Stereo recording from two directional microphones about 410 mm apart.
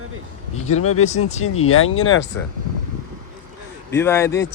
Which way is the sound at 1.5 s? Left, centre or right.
Left.